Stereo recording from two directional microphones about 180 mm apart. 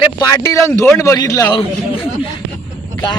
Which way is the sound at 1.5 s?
30° left (ahead or behind).